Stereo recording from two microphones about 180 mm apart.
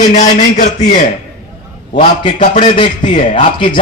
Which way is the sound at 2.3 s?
45° left (ahead or behind).